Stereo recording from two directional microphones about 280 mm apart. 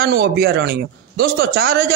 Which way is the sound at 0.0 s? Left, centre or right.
Right.